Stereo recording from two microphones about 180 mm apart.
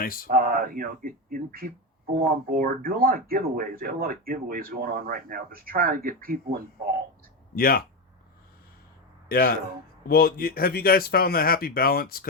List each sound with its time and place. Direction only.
0.0 s speech: 50° left (ahead or behind)
0.3 s speech: 50° right (ahead or behind)
7.5 s speech: 55° left (ahead or behind)
9.3 s speech: 55° left (ahead or behind)